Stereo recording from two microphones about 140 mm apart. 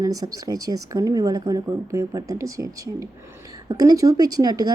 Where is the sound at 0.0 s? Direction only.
25° right (ahead or behind).